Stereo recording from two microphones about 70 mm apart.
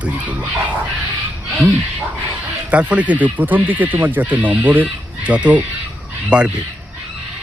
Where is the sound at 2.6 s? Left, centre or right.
Centre.